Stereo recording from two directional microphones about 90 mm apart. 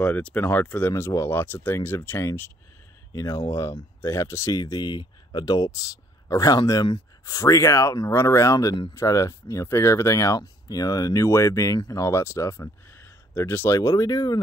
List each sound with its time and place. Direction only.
0.0 s speech: 15° left (ahead or behind)
3.1 s speech: 35° left (ahead or behind)